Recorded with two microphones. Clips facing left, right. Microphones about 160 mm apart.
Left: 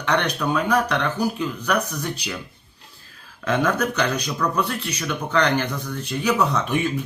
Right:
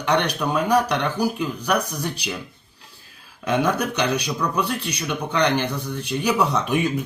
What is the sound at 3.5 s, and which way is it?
Speech, 10° right (ahead or behind).